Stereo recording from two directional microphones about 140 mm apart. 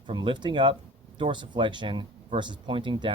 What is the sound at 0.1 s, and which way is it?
Speech, 35° right (ahead or behind).